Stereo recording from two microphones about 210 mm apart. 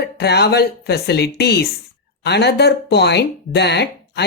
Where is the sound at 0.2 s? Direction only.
50° left (ahead or behind).